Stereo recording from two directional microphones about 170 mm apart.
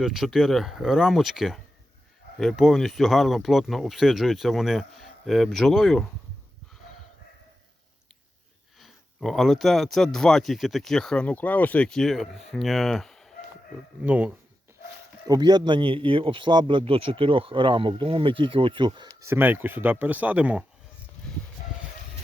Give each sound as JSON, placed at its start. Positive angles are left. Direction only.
{"t": 0.0, "sound": "speech", "side_deg": 0}
{"t": 8.8, "sound": "speech", "side_deg": 0}
{"t": 14.0, "sound": "speech", "side_deg": -10}
{"t": 15.3, "sound": "speech", "side_deg": -25}
{"t": 19.2, "sound": "speech", "side_deg": -15}